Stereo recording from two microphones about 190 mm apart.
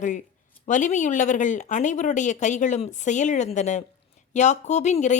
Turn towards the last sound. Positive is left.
turn(degrees=40)  # may be behind; listen again after turning